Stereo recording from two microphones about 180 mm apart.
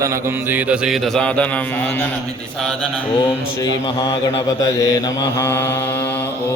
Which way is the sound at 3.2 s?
25° left (ahead or behind).